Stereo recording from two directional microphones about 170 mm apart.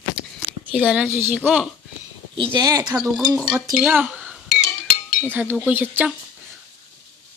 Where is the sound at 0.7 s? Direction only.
10° right (ahead or behind).